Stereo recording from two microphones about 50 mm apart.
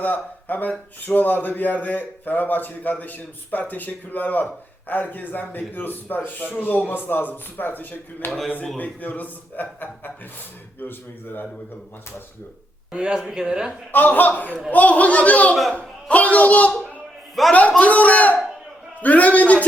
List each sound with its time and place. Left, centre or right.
0.0 s a man's voice: left
12.9 s speech: centre
13.9 s a man's voice: left
19.0 s a sound: left